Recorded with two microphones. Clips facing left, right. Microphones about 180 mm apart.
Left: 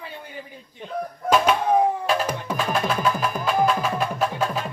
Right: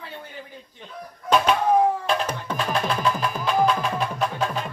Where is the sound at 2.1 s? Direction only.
5° left (ahead or behind).